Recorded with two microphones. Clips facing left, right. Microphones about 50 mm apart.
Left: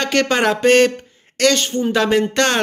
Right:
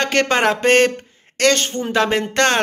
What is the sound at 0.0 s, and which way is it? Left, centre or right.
A man's voice, right.